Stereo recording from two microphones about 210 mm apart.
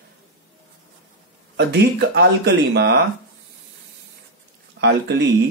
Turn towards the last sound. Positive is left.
turn(degrees=-55)  # may be behind; listen again after turning